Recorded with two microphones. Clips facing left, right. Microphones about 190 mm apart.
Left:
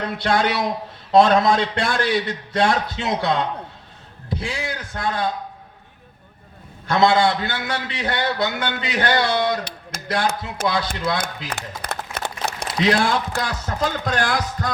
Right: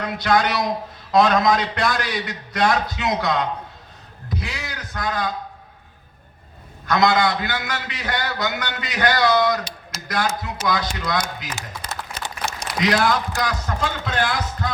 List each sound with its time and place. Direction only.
0.0 s a man's voice: 30° left (ahead or behind)
6.8 s a man's voice: 30° left (ahead or behind)
9.9 s mechanisms: 50° left (ahead or behind)
10.6 s speech: 50° left (ahead or behind)
11.4 s a sound: 60° left (ahead or behind)
12.6 s a man's voice: 30° left (ahead or behind)